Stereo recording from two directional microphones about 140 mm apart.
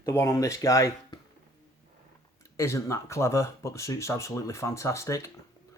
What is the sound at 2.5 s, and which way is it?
Speech, 20° left (ahead or behind).